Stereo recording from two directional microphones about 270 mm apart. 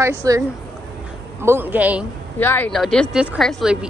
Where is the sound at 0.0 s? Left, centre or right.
Centre.